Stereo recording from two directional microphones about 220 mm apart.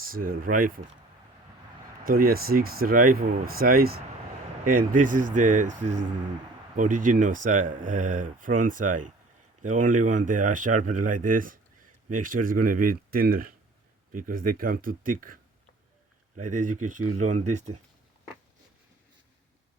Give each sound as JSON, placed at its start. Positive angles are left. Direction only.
{"t": 0.0, "sound": "speech", "side_deg": -40}
{"t": 2.0, "sound": "speech", "side_deg": -40}
{"t": 16.4, "sound": "speech", "side_deg": -35}